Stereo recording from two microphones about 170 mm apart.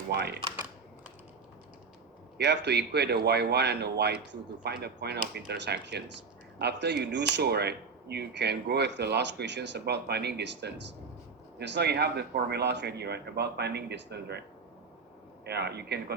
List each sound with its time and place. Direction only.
0.1 s speech: 75° right (ahead or behind)
2.4 s speech: 80° right
7.3 s speech: 75° right (ahead or behind)
15.4 s speech: 75° right (ahead or behind)